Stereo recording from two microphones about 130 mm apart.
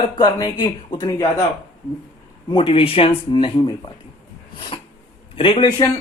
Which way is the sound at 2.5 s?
40° left (ahead or behind).